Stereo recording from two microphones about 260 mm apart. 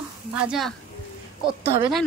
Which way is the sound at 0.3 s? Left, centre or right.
Centre.